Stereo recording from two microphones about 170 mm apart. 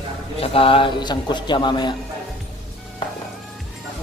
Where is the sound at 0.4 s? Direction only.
35° left (ahead or behind).